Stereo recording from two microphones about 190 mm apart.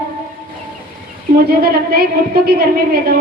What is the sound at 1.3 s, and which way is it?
A woman's voice, 50° right (ahead or behind).